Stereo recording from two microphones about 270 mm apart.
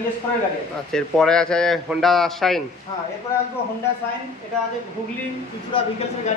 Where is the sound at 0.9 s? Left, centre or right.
Centre.